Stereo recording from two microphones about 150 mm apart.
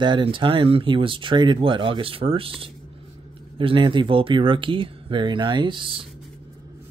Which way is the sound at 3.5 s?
35° right (ahead or behind).